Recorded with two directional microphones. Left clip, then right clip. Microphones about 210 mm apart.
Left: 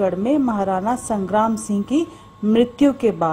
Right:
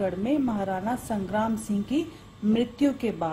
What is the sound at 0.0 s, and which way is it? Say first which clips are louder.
A woman's voice: left 8 dB; 30° left (ahead or behind).